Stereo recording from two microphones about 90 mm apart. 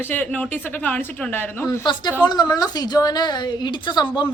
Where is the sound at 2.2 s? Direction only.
50° left (ahead or behind).